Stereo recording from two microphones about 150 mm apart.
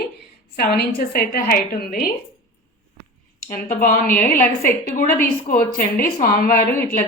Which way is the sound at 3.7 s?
65° left (ahead or behind).